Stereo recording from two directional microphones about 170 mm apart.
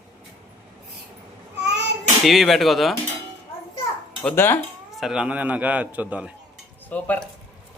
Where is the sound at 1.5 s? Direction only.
90° right.